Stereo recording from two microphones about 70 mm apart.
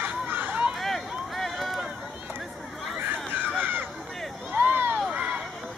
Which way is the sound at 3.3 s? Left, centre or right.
Right.